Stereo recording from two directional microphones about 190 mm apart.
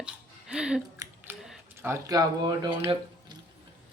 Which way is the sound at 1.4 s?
10° right (ahead or behind).